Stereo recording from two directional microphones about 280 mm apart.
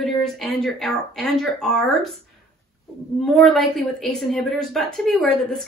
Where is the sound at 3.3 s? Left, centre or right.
Centre.